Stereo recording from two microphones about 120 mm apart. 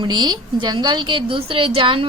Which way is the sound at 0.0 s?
40° right (ahead or behind).